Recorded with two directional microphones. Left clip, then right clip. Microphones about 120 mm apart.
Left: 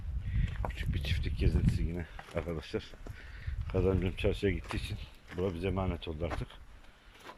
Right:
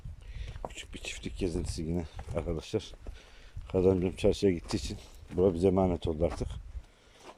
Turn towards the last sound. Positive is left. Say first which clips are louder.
# right 7 dB
turn(degrees=-50)  # may be behind; listen again after turning